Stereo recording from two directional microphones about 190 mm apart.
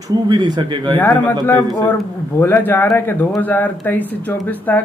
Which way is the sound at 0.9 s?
10° left (ahead or behind).